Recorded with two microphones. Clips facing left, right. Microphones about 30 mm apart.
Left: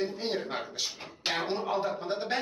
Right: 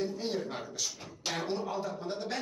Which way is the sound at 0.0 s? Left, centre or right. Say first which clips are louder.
Left 2 dB; left.